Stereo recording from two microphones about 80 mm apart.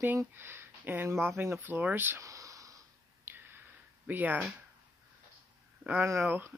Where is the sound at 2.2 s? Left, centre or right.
Right.